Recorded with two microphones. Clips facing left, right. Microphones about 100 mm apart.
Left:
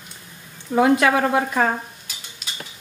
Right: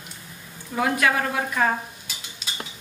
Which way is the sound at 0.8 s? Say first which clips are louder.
Left 6 dB; 30° left (ahead or behind).